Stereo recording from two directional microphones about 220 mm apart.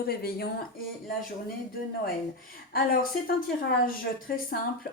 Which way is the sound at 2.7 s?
40° left (ahead or behind).